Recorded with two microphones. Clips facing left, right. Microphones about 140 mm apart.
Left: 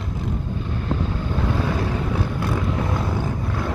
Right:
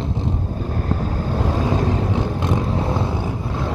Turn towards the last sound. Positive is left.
turn(degrees=-25)  # may be behind; listen again after turning